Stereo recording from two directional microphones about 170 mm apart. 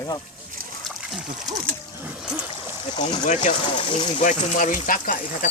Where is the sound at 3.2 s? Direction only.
45° left (ahead or behind).